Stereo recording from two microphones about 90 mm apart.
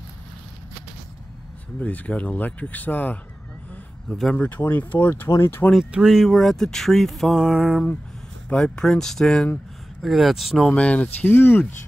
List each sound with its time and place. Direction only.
1.8 s speech: 15° left (ahead or behind)
4.1 s speech: 5° left (ahead or behind)
4.4 s speech: 20° left (ahead or behind)
5.9 s speech: 5° right (ahead or behind)
8.5 s speech: 10° left (ahead or behind)
10.7 s speech: 15° left (ahead or behind)